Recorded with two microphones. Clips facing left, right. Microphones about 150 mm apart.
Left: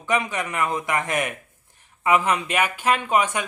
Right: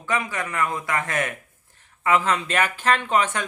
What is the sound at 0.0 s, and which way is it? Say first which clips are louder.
Speech: left 2 dB; 20° left (ahead or behind).